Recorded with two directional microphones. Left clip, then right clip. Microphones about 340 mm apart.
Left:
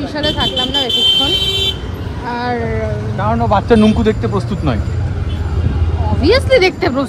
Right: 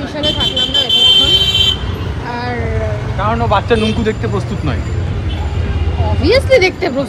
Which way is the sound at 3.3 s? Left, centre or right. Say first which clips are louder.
Left 1 dB; left.